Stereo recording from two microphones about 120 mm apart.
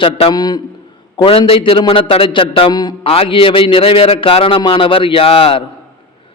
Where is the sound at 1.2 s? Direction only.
50° left (ahead or behind).